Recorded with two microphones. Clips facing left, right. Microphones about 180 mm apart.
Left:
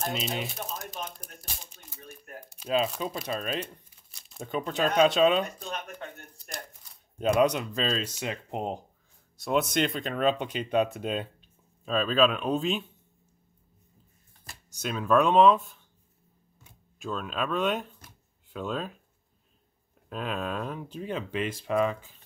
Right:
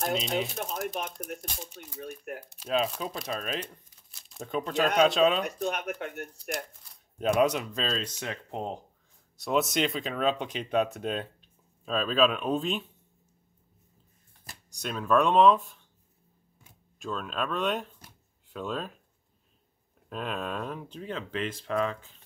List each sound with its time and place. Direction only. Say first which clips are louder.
0.0 s speech: right 3 dB; 5° left (ahead or behind)
2.5 s speech: left 1 dB; centre (ahead or behind)
5.6 s speech: right 6 dB; 70° right (ahead or behind)
6.8 s speech: left 2 dB; centre (ahead or behind)
8.2 s speech: left 2 dB; 15° left (ahead or behind)
9.4 s speech: left 1 dB; centre (ahead or behind)
14.7 s speech: left 1 dB; centre (ahead or behind)
17.0 s speech: left 1 dB; centre (ahead or behind)
20.1 s speech: left 1 dB; centre (ahead or behind)
21.0 s speech: left 3 dB; 15° left (ahead or behind)